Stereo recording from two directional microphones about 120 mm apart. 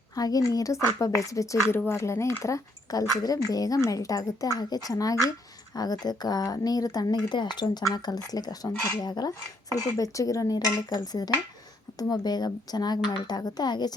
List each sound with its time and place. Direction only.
0.2 s a woman's voice: 30° left (ahead or behind)